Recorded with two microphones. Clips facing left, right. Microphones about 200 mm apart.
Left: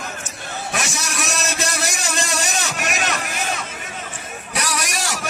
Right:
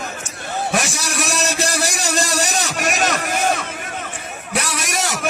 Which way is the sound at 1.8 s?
40° right (ahead or behind).